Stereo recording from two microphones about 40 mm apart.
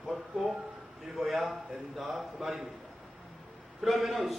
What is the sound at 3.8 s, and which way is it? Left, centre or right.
Speech, centre.